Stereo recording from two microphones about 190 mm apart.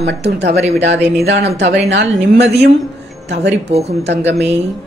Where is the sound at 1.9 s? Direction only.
65° right (ahead or behind).